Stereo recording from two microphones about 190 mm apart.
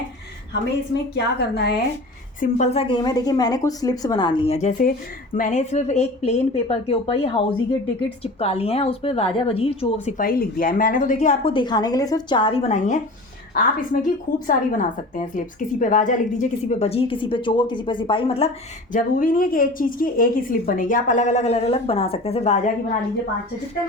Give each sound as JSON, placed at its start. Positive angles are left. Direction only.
{"t": 1.1, "sound": "a woman's voice", "side_deg": 60}
{"t": 2.4, "sound": "a woman's voice", "side_deg": 35}
{"t": 10.2, "sound": "speech", "side_deg": 50}
{"t": 11.5, "sound": "a woman's voice", "side_deg": 20}
{"t": 18.9, "sound": "a woman's voice", "side_deg": 45}